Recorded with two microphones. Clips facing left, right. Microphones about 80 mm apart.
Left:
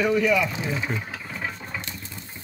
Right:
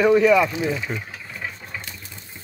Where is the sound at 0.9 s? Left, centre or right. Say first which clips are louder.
Even; centre.